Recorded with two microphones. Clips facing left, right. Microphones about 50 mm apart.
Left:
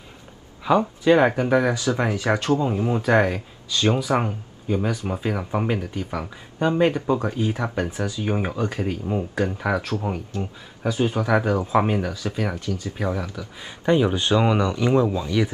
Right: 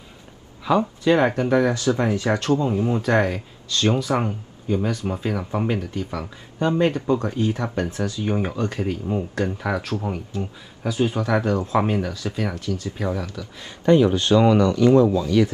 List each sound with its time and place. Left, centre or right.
0.7 s speech: centre
3.8 s speech: centre